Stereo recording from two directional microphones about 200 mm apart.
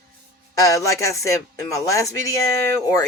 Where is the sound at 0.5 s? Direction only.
15° left (ahead or behind).